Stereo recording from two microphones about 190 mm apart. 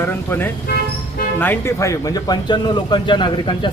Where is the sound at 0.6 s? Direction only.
55° left (ahead or behind).